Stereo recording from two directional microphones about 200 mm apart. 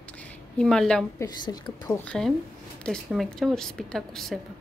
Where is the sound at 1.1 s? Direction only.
20° left (ahead or behind).